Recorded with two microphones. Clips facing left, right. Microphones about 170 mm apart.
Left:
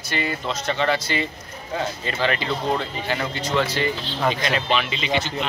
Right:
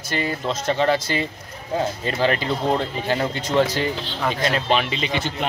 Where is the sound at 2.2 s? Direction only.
40° right (ahead or behind).